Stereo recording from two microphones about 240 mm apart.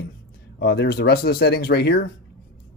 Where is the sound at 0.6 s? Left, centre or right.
Left.